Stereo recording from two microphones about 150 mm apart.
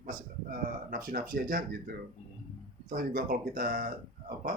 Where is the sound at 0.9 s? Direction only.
75° right (ahead or behind).